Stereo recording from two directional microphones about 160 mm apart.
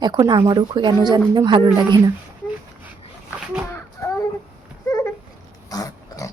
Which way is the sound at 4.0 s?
15° left (ahead or behind).